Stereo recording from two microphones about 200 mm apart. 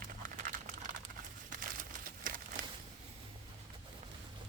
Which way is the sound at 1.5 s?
40° right (ahead or behind).